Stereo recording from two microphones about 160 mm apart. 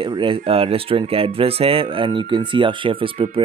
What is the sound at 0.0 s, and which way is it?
Speech, 30° right (ahead or behind).